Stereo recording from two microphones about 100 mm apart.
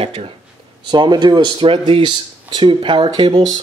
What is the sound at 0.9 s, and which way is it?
Speech, 45° right (ahead or behind).